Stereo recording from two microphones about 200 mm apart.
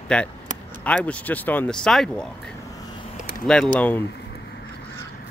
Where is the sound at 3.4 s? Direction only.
5° left (ahead or behind).